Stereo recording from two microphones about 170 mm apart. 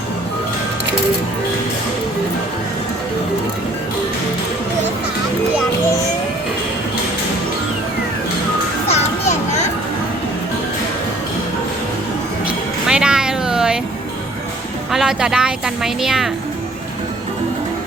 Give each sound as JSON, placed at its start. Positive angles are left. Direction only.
{"t": 8.9, "sound": "children playing", "side_deg": 40}
{"t": 12.5, "sound": "music", "side_deg": -5}
{"t": 14.9, "sound": "a woman's voice", "side_deg": -5}